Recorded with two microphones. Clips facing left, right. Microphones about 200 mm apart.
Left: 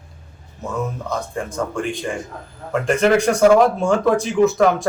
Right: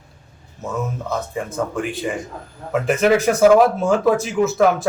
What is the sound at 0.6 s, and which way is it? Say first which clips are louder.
A man's voice: even; centre (ahead or behind).